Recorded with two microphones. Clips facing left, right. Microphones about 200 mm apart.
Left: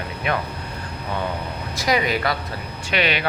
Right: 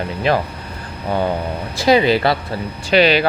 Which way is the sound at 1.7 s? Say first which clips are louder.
Right 8 dB; 30° right (ahead or behind).